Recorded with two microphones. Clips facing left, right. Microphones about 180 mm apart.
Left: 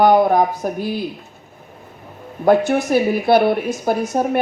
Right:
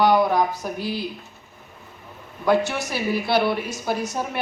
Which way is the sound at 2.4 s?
50° left (ahead or behind).